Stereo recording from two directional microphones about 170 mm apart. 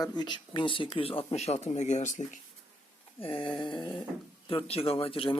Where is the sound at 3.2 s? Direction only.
30° left (ahead or behind).